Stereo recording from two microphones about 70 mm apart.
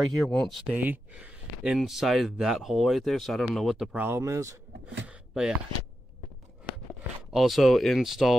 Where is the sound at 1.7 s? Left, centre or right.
Centre.